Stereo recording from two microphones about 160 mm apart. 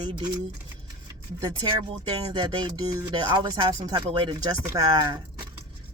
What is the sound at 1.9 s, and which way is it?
Speech, 30° right (ahead or behind).